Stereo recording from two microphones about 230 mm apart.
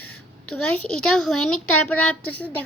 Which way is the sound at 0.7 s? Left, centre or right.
Centre.